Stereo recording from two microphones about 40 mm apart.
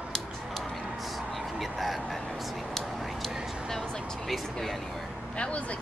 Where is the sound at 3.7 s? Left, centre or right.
Centre.